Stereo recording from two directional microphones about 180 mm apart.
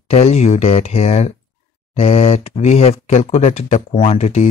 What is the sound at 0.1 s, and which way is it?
Speech, 35° left (ahead or behind).